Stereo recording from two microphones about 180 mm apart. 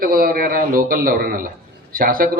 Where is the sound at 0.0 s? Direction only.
50° right (ahead or behind).